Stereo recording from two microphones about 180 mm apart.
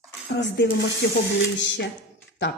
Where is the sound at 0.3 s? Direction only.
70° left (ahead or behind).